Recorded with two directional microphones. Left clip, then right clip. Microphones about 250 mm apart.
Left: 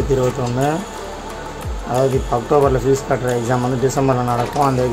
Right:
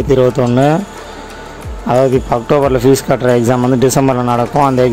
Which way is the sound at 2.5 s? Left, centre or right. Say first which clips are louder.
Right 4 dB; right.